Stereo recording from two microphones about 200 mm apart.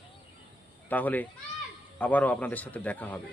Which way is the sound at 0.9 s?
10° left (ahead or behind).